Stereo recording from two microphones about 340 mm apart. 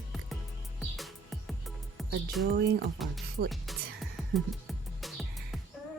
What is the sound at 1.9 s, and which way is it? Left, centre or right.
Speech, centre.